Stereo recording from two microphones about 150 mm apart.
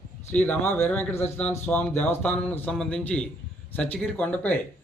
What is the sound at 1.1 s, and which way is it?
Speech, 45° left (ahead or behind).